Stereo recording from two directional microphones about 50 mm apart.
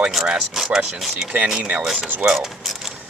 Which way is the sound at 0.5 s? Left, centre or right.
Centre.